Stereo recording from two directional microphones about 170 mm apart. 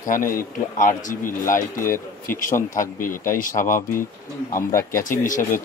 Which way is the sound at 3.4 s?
50° left (ahead or behind).